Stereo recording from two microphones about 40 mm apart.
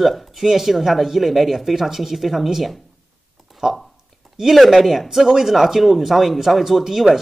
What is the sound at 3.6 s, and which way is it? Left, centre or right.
Speech, centre.